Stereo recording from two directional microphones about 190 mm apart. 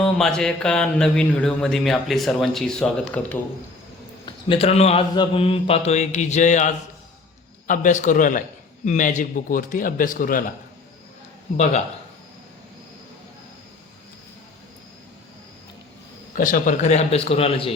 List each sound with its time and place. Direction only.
0.0 s speech: 5° left (ahead or behind)
4.3 s a man's voice: 25° left (ahead or behind); by 10.4 s 45° left (ahead or behind)
11.5 s a man's voice: 35° left (ahead or behind)
16.3 s a man's voice: 45° left (ahead or behind)